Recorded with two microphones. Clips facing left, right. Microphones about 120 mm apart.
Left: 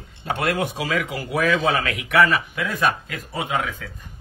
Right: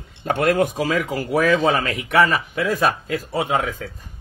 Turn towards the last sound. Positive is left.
turn(degrees=-40)  # may be behind; listen again after turning